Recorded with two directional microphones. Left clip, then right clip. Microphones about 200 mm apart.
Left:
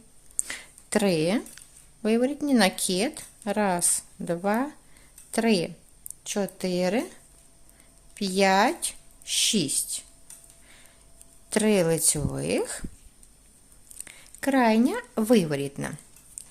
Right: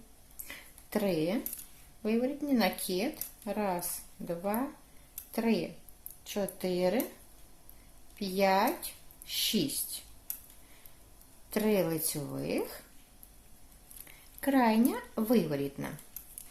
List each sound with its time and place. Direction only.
0.3 s a sound: 45° left (ahead or behind)
2.0 s speech: 40° left (ahead or behind)
8.1 s speech: 40° left (ahead or behind)
11.4 s speech: 40° left (ahead or behind)
14.0 s speech: 35° left (ahead or behind)